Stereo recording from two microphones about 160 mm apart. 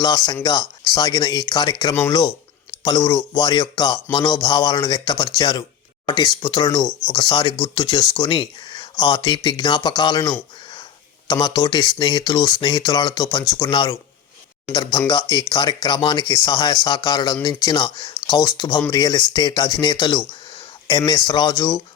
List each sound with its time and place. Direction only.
0.0 s speech: 25° left (ahead or behind)